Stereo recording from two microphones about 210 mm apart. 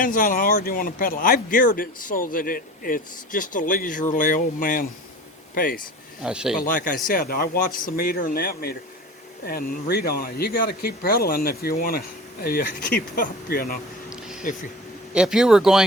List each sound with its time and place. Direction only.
0.0 s speech: 40° left (ahead or behind)
6.2 s speech: 5° right (ahead or behind)
6.6 s speech: 40° left (ahead or behind)
14.1 s a sound: 5° right (ahead or behind)
15.1 s speech: 5° right (ahead or behind)